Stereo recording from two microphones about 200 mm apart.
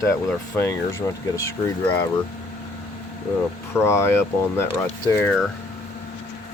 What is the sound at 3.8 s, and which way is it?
Speech, 15° left (ahead or behind).